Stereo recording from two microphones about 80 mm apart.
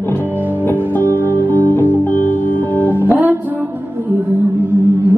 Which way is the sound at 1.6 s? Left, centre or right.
Left.